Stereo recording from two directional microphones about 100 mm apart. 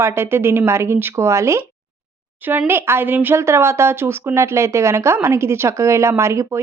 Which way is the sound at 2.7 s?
25° right (ahead or behind).